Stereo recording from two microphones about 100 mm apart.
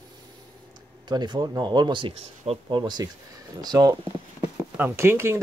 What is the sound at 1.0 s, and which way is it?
Speech, 45° right (ahead or behind).